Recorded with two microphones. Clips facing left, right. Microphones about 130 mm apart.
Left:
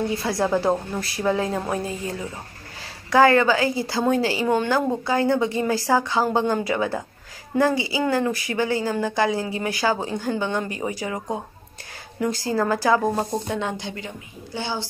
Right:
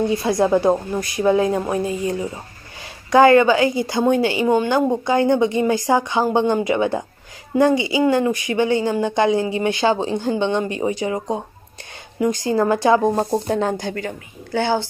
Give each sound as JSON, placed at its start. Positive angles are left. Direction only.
{"t": 0.1, "sound": "speech", "side_deg": -20}
{"t": 13.5, "sound": "a woman's voice", "side_deg": -40}